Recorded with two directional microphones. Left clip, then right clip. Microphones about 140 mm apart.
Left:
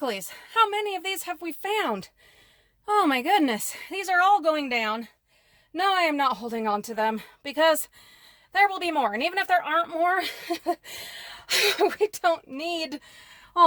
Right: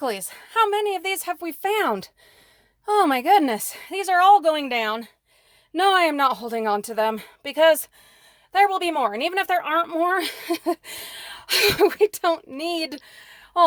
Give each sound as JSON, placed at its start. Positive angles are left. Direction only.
{"t": 0.0, "sound": "speech", "side_deg": -25}